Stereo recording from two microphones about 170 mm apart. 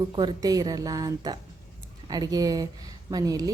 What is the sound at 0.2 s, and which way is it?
A woman's voice, 25° right (ahead or behind).